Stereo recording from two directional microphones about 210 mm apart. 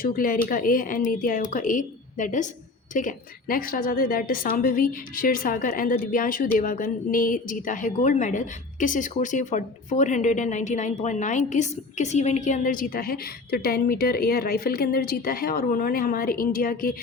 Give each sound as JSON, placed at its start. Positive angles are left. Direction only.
{"t": 0.0, "sound": "a woman's voice", "side_deg": 40}